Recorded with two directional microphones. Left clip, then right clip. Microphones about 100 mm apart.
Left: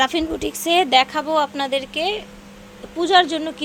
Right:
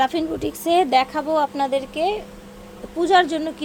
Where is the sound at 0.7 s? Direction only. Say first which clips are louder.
Left 2 dB; 5° left (ahead or behind).